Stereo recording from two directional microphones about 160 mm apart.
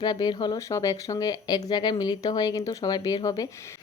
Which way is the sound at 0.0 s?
25° left (ahead or behind).